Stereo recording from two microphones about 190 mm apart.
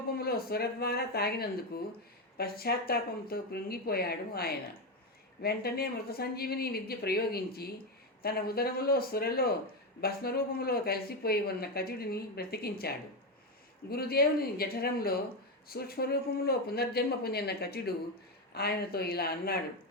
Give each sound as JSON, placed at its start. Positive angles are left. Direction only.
{"t": 0.1, "sound": "speech", "side_deg": 55}
{"t": 13.9, "sound": "speech", "side_deg": 55}